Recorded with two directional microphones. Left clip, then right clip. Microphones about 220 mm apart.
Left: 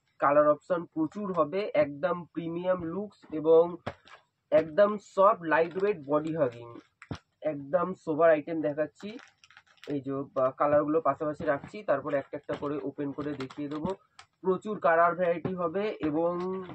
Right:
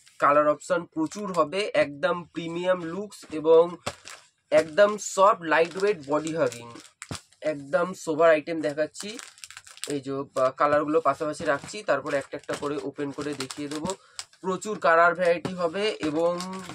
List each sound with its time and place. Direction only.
0.2 s speech: 20° right (ahead or behind)
10.3 s speech: 20° right (ahead or behind); by 13.8 s 5° right (ahead or behind)
13.8 s speech: 15° right (ahead or behind)